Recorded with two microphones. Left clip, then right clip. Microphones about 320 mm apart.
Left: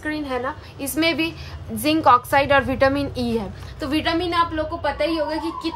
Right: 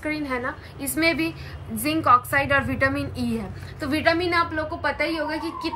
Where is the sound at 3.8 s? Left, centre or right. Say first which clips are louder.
Right 1 dB; centre.